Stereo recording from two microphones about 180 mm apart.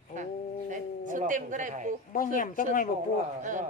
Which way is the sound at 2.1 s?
50° left (ahead or behind).